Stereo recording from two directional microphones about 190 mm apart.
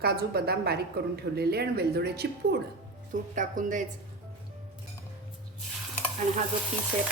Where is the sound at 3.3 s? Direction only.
40° right (ahead or behind).